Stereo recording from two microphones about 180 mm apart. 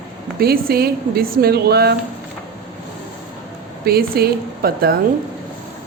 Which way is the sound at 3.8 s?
60° right (ahead or behind).